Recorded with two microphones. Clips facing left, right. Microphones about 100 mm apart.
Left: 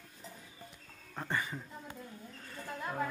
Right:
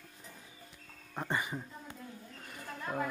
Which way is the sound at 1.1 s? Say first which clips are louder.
Right 1 dB; 15° right (ahead or behind).